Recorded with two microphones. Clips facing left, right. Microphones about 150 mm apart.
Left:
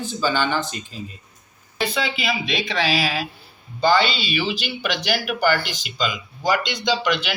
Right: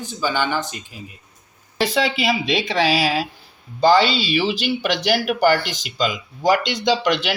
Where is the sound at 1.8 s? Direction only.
80° right.